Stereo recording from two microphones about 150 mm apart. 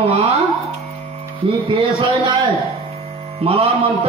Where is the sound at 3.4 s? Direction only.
40° right (ahead or behind).